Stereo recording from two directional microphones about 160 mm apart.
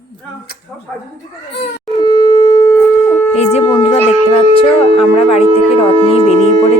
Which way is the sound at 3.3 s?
40° left (ahead or behind).